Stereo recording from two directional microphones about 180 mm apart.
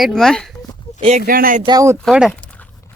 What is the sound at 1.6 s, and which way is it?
Speech, 20° right (ahead or behind).